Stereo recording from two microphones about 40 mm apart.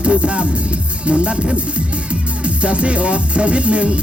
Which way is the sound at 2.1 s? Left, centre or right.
Right.